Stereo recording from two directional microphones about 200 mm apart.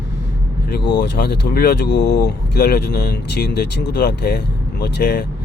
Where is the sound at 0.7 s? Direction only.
60° left (ahead or behind).